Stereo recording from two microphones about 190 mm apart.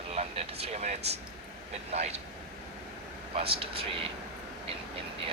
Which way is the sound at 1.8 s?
35° right (ahead or behind).